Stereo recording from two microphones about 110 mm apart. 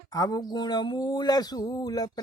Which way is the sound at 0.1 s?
35° left (ahead or behind).